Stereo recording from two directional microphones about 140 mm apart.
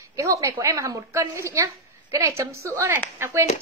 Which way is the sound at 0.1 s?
25° right (ahead or behind).